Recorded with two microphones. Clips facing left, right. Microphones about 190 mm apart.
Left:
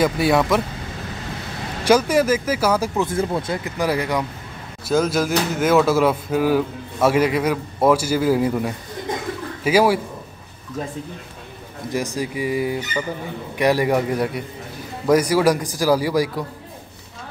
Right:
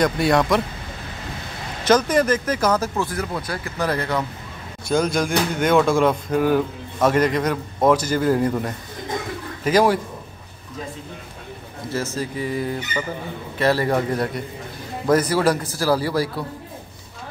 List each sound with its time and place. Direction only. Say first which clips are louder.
0.0 s speech: left 1 dB; 5° left (ahead or behind)
1.9 s speech: left 1 dB; 10° left (ahead or behind)
3.1 s speech: left 5 dB; 25° left (ahead or behind); by 9.9 s 10° left (ahead or behind)
11.9 s speech: left 2 dB; 15° left (ahead or behind)